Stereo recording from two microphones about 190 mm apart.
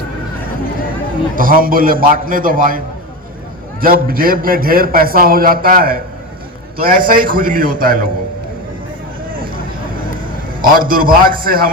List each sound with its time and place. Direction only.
1.4 s a man's voice: 45° right (ahead or behind)
10.6 s a man's voice: 50° right (ahead or behind)